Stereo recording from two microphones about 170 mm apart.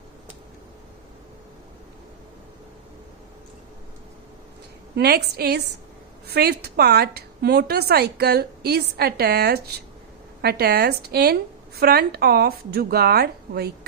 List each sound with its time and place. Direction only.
4.9 s a woman's voice: 70° right (ahead or behind)